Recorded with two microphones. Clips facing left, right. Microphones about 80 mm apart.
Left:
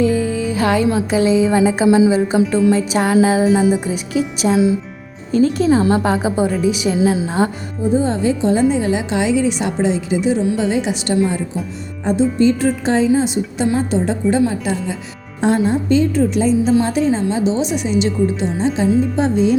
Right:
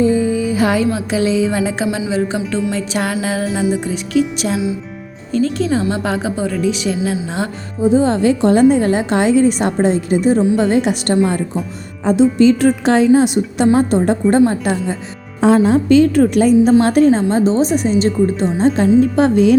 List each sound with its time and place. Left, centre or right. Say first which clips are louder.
0.0 s music: right 2 dB; right
0.4 s music: right 1 dB; centre
1.1 s music: left 3 dB; centre
1.9 s a woman's voice: left 9 dB; left
2.1 s a woman's voice: left 3 dB; centre
3.4 s music: left 4 dB; centre
5.9 s a woman's voice: left 3 dB; centre
7.8 s a woman's voice: right 4 dB; right
8.7 s a woman's voice: right 3 dB; right
12.1 s a woman's voice: right 4 dB; right
15.6 s a woman's voice: right 5 dB; right
18.6 s a woman's voice: right 4 dB; right